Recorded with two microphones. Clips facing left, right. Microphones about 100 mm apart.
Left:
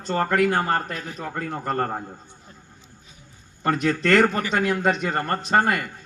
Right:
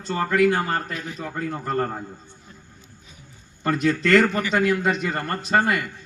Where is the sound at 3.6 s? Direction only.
50° left (ahead or behind).